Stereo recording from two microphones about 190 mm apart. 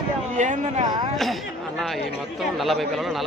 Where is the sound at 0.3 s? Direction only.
40° right (ahead or behind).